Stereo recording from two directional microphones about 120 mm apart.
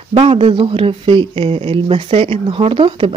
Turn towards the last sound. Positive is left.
turn(degrees=-50)  # may be behind; listen again after turning